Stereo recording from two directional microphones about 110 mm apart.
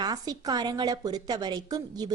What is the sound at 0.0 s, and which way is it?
A woman's voice, 35° right (ahead or behind).